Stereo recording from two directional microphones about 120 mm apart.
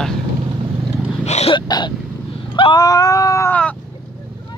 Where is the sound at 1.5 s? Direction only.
35° left (ahead or behind).